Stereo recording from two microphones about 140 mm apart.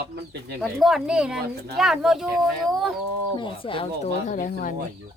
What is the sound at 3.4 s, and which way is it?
Speech, 40° left (ahead or behind).